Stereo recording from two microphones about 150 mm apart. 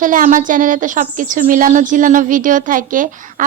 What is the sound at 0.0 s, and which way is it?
A woman's voice, 60° right (ahead or behind).